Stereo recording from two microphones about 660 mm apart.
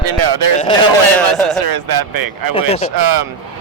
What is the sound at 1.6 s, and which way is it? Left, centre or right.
Speech, right.